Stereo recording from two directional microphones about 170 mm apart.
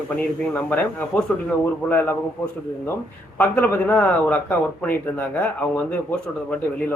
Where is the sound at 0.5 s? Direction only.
10° left (ahead or behind).